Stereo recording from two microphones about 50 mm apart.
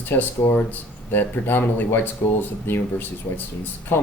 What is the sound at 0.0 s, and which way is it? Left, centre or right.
Speech, left.